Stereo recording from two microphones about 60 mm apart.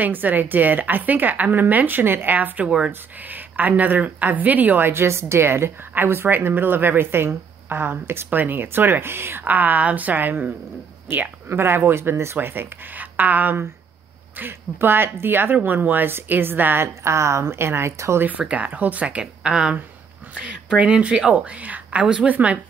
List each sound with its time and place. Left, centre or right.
0.0 s speech: right
2.6 s speech: centre
2.9 s speech: right
9.4 s speech: right
12.4 s speech: right
18.5 s speech: right